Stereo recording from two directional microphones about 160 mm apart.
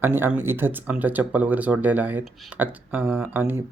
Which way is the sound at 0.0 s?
10° right (ahead or behind).